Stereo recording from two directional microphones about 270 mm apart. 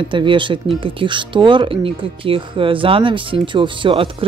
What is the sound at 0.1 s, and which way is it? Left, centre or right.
Speech, centre.